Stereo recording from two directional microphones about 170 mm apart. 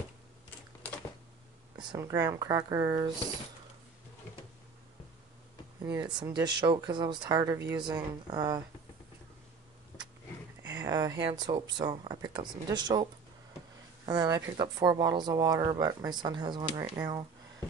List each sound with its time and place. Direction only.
1.8 s speech: 20° right (ahead or behind)
5.8 s speech: 25° right (ahead or behind)
9.9 s vehicle: 10° left (ahead or behind)
10.7 s speech: 20° right (ahead or behind)